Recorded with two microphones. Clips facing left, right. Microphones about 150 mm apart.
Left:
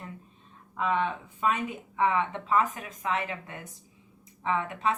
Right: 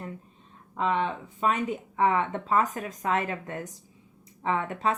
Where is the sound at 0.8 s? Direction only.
20° right (ahead or behind).